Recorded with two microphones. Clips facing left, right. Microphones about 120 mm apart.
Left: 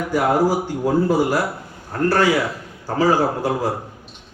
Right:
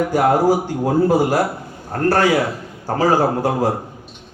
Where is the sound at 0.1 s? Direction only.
50° right (ahead or behind).